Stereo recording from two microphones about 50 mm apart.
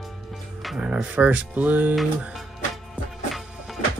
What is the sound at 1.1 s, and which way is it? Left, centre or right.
Speech, right.